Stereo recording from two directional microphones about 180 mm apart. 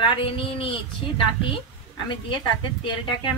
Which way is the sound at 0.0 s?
30° left (ahead or behind).